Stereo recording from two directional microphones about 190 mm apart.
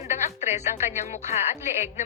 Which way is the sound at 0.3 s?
35° left (ahead or behind).